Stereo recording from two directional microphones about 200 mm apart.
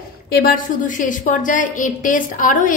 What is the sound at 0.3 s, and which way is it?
A woman's voice, 45° left (ahead or behind).